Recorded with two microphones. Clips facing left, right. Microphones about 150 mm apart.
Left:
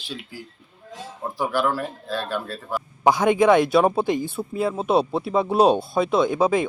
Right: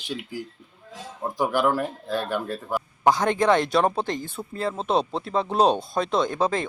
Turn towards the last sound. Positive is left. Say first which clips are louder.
# left 4 dB
turn(degrees=10)  # may be behind; listen again after turning